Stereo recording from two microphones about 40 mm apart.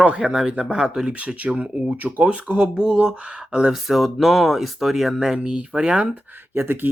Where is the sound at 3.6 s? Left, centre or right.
Centre.